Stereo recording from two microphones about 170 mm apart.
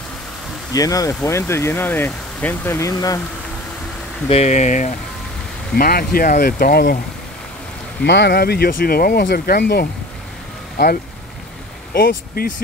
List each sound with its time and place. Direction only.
0.7 s speech: 20° left (ahead or behind)
4.3 s speech: 40° left (ahead or behind)
5.8 s speech: 60° left (ahead or behind)
8.0 s speech: 85° left
11.9 s speech: 60° left (ahead or behind)